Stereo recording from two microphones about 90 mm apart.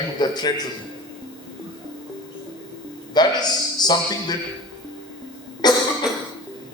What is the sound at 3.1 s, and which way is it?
A man's voice, 50° left (ahead or behind).